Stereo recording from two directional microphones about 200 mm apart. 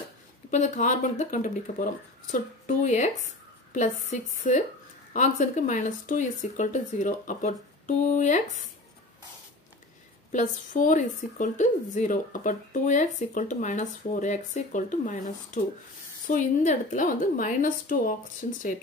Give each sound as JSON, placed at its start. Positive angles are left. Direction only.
{"t": 0.5, "sound": "a woman's voice", "side_deg": 40}
{"t": 10.3, "sound": "a woman's voice", "side_deg": 40}